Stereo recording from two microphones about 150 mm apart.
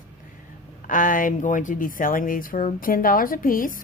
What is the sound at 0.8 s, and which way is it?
A woman's voice, 60° left (ahead or behind).